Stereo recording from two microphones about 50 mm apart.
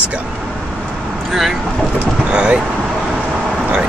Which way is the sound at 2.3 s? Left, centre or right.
Right.